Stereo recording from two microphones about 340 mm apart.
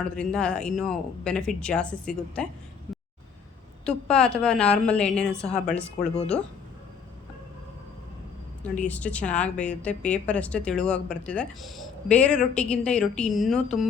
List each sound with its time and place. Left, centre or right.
0.0 s speech: centre
3.8 s speech: centre
8.6 s speech: centre